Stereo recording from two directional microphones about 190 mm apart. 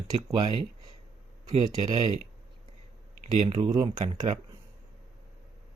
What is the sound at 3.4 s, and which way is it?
Speech, 30° right (ahead or behind).